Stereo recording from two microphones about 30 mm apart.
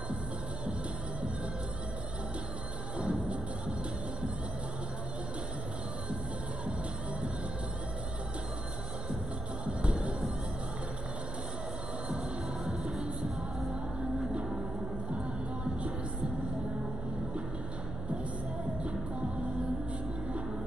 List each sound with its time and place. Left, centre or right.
3.0 s music: right
9.7 s music: right